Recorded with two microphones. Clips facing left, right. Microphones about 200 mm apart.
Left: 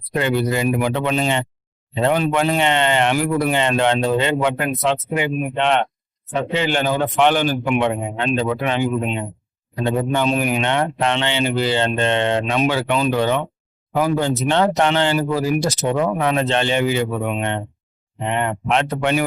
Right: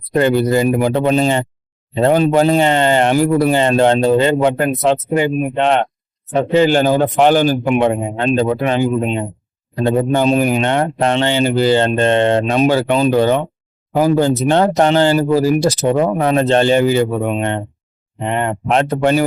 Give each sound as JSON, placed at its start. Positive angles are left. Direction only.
{"t": 0.1, "sound": "a man's voice", "side_deg": -40}